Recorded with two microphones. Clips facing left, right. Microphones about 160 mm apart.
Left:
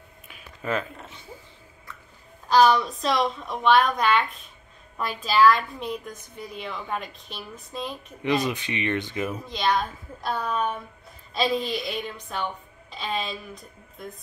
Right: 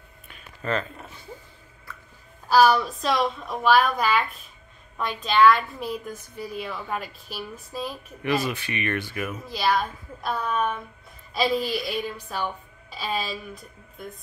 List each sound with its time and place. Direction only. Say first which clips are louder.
0.3 s a sound: even; 5° left (ahead or behind)
2.5 s a woman's voice: even; 5° right (ahead or behind)
8.2 s speech: left 1 dB; 20° left (ahead or behind)
9.4 s a woman's voice: right 2 dB; 5° right (ahead or behind)
10.2 s a woman's voice: even; 30° left (ahead or behind)
11.3 s a woman's voice: right 1 dB; 5° right (ahead or behind)